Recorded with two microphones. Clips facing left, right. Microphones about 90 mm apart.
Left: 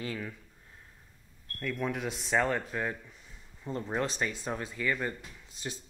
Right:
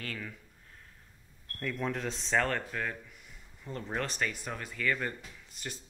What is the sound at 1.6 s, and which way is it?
Speech, centre (ahead or behind).